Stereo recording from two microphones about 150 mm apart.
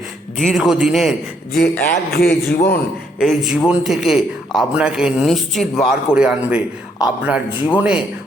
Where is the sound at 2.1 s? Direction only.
90° left.